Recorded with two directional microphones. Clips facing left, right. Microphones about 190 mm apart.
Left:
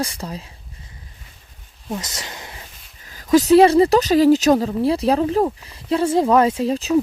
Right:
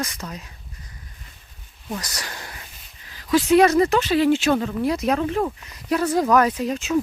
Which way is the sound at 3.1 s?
45° left (ahead or behind).